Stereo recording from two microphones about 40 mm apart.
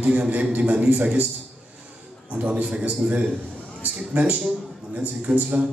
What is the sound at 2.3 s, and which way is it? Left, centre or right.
A man's voice, right.